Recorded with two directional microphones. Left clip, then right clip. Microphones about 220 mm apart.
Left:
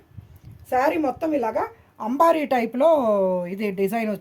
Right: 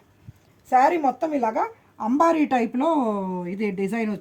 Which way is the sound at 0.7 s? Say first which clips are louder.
Right 3 dB; 20° left (ahead or behind).